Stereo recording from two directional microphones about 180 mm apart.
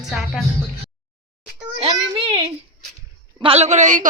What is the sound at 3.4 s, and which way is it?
Speech, 35° right (ahead or behind).